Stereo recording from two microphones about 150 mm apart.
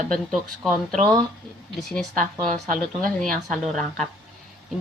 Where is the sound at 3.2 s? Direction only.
5° left (ahead or behind).